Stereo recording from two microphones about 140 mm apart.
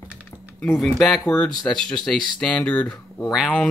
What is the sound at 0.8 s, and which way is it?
Speech, 5° left (ahead or behind).